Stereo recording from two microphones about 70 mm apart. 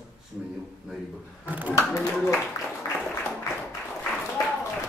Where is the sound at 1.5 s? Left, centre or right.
Right.